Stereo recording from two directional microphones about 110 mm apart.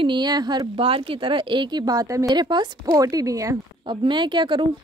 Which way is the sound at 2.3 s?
40° right (ahead or behind).